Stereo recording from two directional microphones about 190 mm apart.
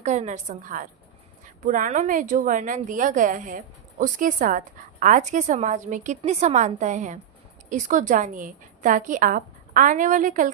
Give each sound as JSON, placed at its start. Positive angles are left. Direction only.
{"t": 0.0, "sound": "a woman's voice", "side_deg": -40}